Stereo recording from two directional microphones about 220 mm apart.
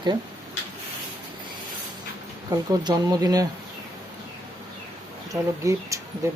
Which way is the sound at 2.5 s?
20° right (ahead or behind).